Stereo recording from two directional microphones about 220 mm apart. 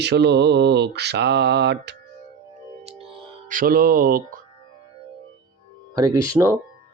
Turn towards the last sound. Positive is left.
turn(degrees=-15)  # may be behind; listen again after turning